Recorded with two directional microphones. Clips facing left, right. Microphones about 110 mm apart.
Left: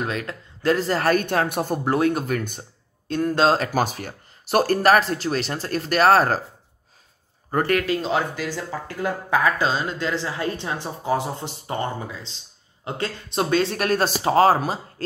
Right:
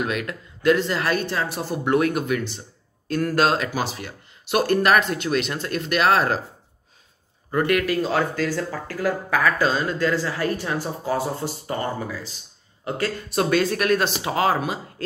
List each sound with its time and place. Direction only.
0.0 s speech: 30° left (ahead or behind); by 1.8 s 55° left (ahead or behind)
1.9 s speech: 30° left (ahead or behind)
3.1 s speech: 25° left (ahead or behind)
7.5 s speech: 35° left (ahead or behind)